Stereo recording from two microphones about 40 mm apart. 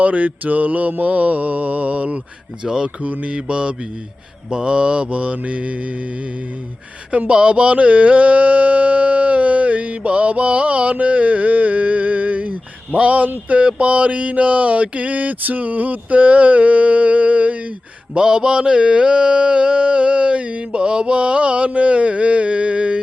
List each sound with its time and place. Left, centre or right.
0.0 s mantra: right
2.6 s mantra: centre
3.0 s mantra: right
7.3 s mantra: right
18.1 s mantra: right